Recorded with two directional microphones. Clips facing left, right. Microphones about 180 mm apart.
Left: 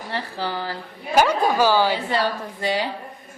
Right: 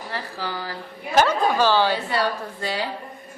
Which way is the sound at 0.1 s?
30° left (ahead or behind).